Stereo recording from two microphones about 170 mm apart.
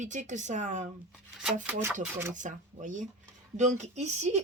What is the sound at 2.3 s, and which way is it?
Speech, 45° right (ahead or behind).